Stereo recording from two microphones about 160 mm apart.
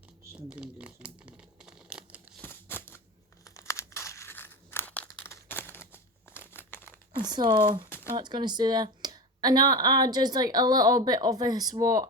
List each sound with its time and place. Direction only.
0.3 s crumpling: 5° right (ahead or behind)
2.4 s a sound: 15° left (ahead or behind)
3.4 s crumpling: 20° left (ahead or behind)
7.3 s speech: 25° right (ahead or behind)
7.9 s a sound: 15° left (ahead or behind)
8.1 s speech: 25° right (ahead or behind)